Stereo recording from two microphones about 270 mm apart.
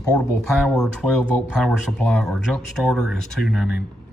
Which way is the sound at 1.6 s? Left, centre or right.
Centre.